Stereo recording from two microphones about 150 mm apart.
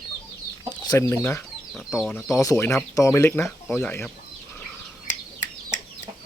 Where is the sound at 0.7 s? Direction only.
20° left (ahead or behind); by 2.4 s 5° left (ahead or behind).